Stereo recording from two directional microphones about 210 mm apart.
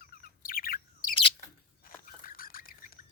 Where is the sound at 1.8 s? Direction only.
40° left (ahead or behind).